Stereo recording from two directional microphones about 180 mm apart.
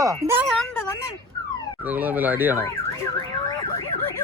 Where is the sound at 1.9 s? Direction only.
10° right (ahead or behind).